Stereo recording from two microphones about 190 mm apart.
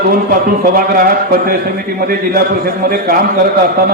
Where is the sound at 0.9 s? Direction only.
50° right (ahead or behind).